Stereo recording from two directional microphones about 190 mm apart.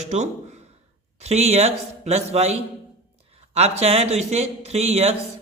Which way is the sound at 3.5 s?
35° right (ahead or behind).